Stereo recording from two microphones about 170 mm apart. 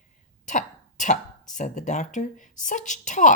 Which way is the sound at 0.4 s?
45° left (ahead or behind).